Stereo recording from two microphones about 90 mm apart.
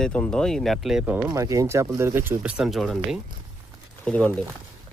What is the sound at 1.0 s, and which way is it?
Speech, 15° right (ahead or behind).